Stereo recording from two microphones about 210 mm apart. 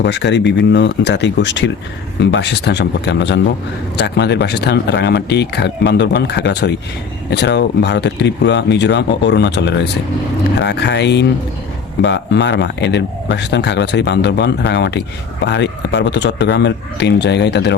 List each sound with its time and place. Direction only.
0.0 s speech: 55° left (ahead or behind)